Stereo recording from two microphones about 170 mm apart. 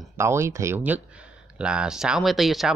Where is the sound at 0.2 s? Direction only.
15° right (ahead or behind).